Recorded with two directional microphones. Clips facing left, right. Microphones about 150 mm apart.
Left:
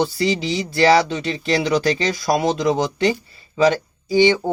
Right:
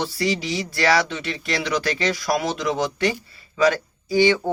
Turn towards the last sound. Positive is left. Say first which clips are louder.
# left 3 dB
turn(degrees=20)  # may be behind; listen again after turning